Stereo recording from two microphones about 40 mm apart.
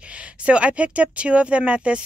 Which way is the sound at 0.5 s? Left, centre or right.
Right.